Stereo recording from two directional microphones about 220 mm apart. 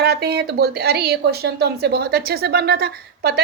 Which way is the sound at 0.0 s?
45° right (ahead or behind).